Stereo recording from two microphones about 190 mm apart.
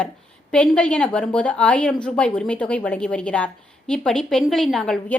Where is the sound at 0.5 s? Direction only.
5° left (ahead or behind).